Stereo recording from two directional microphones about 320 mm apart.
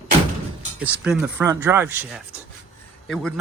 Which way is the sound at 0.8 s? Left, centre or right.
Centre.